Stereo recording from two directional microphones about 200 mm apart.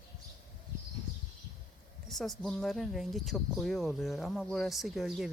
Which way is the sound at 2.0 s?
Centre (ahead or behind).